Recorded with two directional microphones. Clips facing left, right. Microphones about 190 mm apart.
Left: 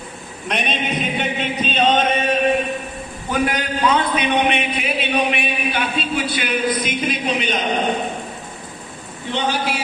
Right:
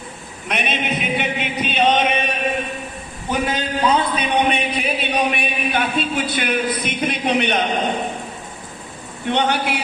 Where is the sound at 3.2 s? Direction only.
25° right (ahead or behind).